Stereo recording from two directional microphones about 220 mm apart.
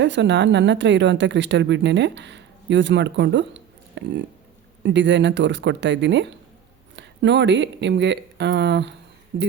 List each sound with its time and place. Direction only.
0.0 s speech: 55° right (ahead or behind)